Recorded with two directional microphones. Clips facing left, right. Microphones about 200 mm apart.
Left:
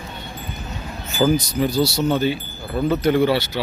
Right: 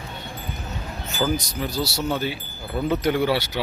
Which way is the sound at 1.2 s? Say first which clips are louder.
Left 6 dB; 15° left (ahead or behind).